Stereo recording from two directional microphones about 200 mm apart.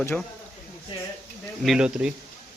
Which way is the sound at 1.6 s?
Centre (ahead or behind).